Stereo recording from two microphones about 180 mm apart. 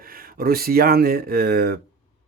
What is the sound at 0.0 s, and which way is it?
Speech, 55° right (ahead or behind).